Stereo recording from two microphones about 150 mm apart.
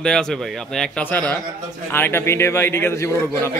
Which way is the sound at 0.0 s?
5° left (ahead or behind).